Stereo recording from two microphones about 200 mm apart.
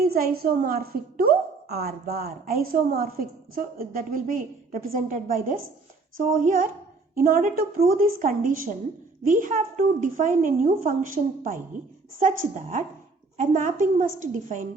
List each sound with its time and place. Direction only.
0.0 s a woman's voice: 50° right (ahead or behind)